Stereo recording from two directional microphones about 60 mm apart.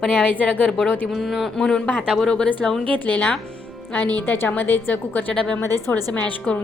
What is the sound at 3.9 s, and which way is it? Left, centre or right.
A woman's voice, left.